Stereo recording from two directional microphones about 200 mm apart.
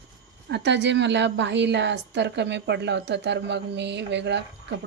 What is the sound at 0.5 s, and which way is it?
A woman's voice, 60° right (ahead or behind).